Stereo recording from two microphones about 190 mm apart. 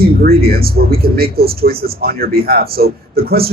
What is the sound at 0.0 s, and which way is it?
A man's voice, 55° right (ahead or behind).